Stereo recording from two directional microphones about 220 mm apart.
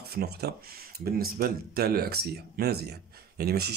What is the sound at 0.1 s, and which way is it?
Speech, 45° right (ahead or behind).